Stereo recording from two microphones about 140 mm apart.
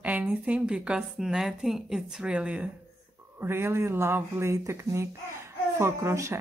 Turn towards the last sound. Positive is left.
turn(degrees=-20)  # may be behind; listen again after turning